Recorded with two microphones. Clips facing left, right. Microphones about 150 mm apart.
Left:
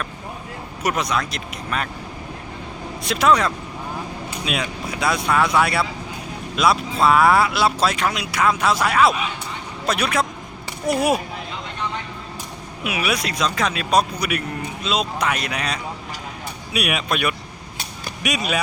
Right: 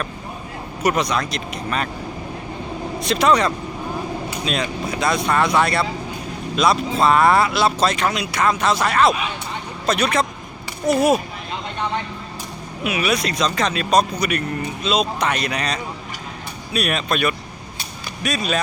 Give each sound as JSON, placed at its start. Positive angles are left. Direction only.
{"t": 0.8, "sound": "speech", "side_deg": 5}
{"t": 3.0, "sound": "speech", "side_deg": 5}
{"t": 12.8, "sound": "speech", "side_deg": 5}